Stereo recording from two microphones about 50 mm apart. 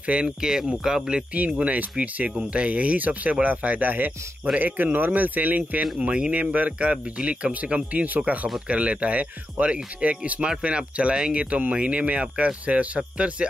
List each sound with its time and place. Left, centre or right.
0.0 s speech: right
0.4 s speech: centre
1.3 s speech: right
5.9 s speech: centre